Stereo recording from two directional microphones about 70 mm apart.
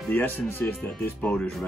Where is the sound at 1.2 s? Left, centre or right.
Centre.